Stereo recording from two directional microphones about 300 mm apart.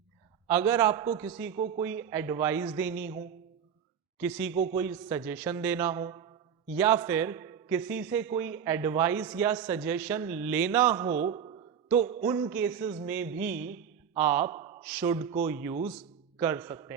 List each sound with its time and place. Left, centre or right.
0.4 s a man's voice: centre
1.5 s speech: right
1.8 s a man's voice: centre
4.2 s a man's voice: centre
11.2 s a man's voice: right